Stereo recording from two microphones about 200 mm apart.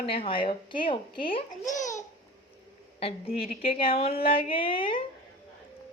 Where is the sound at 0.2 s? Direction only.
25° left (ahead or behind).